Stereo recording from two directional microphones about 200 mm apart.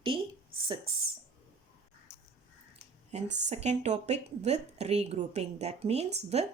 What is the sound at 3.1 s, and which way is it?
Speech, 35° right (ahead or behind).